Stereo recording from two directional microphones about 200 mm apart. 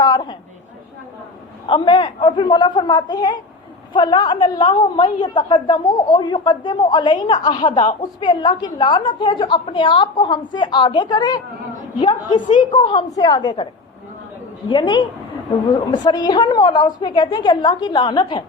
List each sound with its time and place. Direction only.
0.0 s chatter: 20° left (ahead or behind)
1.6 s a woman's voice: 25° left (ahead or behind)
14.7 s a woman's voice: 25° left (ahead or behind)